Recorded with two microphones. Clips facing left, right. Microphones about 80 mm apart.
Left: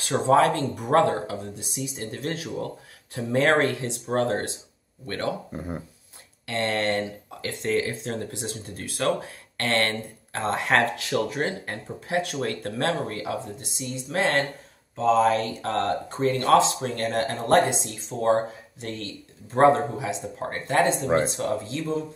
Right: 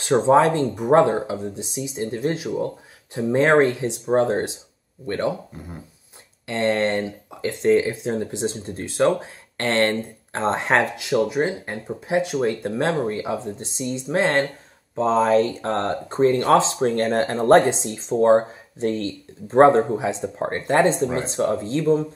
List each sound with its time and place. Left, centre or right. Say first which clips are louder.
0.0 s speech: right 4 dB; right
5.5 s speech: left 5 dB; left
6.4 s speech: right 5 dB; right